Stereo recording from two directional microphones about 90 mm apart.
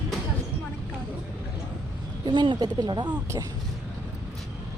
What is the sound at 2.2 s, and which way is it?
Speech, 60° right (ahead or behind).